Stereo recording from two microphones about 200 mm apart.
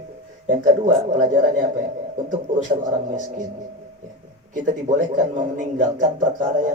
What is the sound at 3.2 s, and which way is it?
Speech, 40° right (ahead or behind).